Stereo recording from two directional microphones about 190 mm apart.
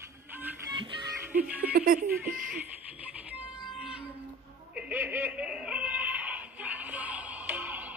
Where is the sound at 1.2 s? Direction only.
10° right (ahead or behind).